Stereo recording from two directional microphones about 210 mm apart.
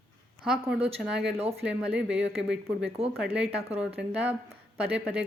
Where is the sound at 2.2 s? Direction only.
55° right (ahead or behind).